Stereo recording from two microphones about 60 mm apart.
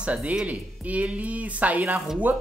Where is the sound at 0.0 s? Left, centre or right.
Right.